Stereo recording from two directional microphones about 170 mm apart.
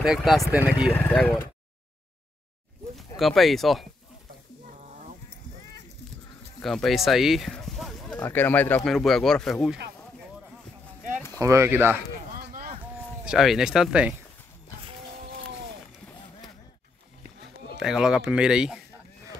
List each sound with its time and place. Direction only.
0.0 s speech: centre (ahead or behind)
3.2 s speech: centre (ahead or behind)
6.6 s speech: centre (ahead or behind)
11.3 s speech: 20° right (ahead or behind)
12.4 s a sound: 55° right (ahead or behind)
13.2 s speech: 5° right (ahead or behind)
17.7 s speech: 5° right (ahead or behind)